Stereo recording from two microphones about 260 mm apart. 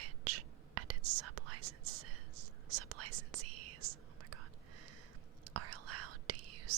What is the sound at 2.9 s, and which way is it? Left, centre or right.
Whispering, right.